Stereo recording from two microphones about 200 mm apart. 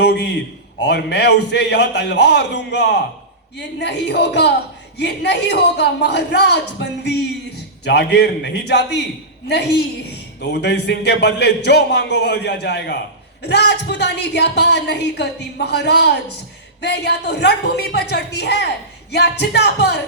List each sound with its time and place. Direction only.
0.0 s a man's voice: 55° left (ahead or behind)